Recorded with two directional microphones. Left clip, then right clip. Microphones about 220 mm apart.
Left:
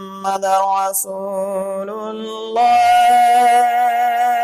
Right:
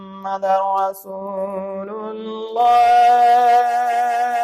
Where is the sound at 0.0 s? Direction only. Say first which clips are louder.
Left 3 dB; 45° left (ahead or behind).